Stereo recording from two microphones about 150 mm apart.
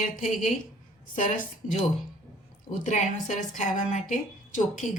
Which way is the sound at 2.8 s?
55° left (ahead or behind).